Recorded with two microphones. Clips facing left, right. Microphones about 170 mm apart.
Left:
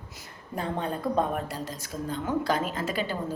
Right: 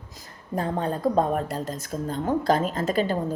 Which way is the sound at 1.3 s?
50° right (ahead or behind).